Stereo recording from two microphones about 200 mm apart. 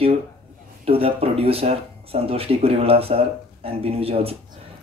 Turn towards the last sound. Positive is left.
turn(degrees=-30)  # may be behind; listen again after turning